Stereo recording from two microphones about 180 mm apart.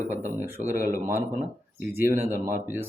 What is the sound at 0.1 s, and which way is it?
Speech, 10° right (ahead or behind).